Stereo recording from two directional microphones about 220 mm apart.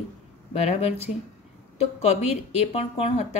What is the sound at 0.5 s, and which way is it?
Speech, 30° left (ahead or behind).